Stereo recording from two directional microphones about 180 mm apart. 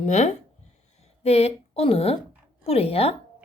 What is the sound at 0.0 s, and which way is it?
A woman's voice, 40° left (ahead or behind).